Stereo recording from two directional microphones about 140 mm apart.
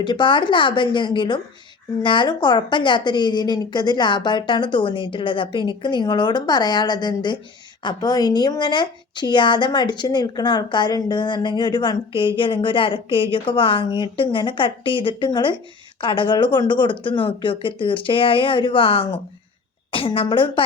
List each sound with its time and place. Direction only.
0.0 s a woman's voice: 35° left (ahead or behind)